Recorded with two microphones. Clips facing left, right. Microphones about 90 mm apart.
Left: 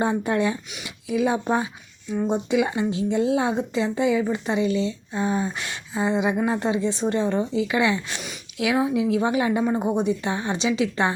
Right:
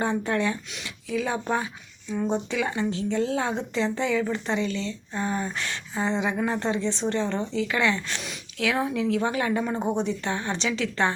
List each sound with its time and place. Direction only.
0.0 s speech: 15° left (ahead or behind)